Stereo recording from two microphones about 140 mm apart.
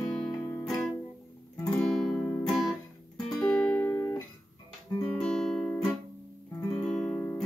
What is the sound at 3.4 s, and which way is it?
Music, 10° left (ahead or behind).